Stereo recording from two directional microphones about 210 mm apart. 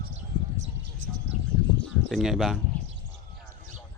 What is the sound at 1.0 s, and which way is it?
Bird, 65° right (ahead or behind).